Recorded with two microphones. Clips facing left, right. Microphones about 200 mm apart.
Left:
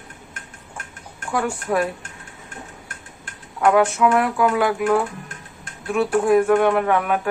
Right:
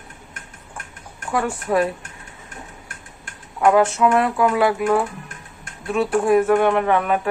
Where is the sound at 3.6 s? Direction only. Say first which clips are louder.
Right 1 dB; 25° right (ahead or behind).